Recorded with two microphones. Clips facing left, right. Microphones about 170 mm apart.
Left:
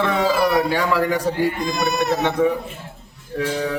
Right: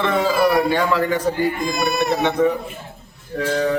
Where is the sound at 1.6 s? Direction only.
10° right (ahead or behind).